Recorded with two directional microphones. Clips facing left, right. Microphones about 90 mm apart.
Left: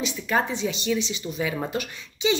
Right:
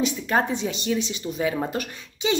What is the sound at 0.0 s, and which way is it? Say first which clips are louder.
Speech: right 2 dB; 45° right (ahead or behind).